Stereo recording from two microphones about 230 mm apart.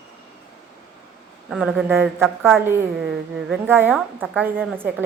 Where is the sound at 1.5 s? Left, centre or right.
Centre.